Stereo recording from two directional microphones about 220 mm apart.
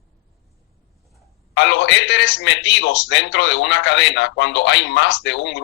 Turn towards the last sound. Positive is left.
turn(degrees=55)  # may be behind; listen again after turning